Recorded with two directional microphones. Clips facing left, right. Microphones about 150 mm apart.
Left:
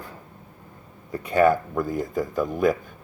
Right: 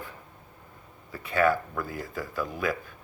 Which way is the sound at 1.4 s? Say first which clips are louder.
Left 5 dB; 40° left (ahead or behind).